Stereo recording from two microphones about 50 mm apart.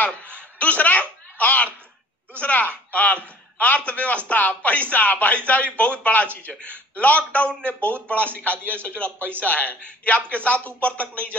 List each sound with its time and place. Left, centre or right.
0.6 s speech: left